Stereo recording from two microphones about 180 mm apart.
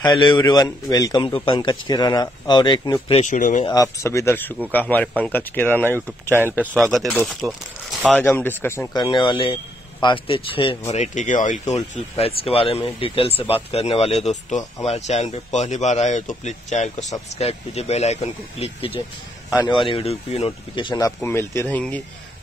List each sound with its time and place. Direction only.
0.0 s a man's voice: 25° left (ahead or behind)
3.2 s speech: 45° left (ahead or behind)
3.6 s speech: 20° left (ahead or behind)
6.7 s speech: centre (ahead or behind)
8.9 s a man's voice: 25° left (ahead or behind)
10.9 s a man's voice: 40° left (ahead or behind)
21.2 s speech: 15° left (ahead or behind)